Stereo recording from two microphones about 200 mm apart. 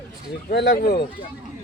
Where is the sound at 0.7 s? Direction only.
50° left (ahead or behind).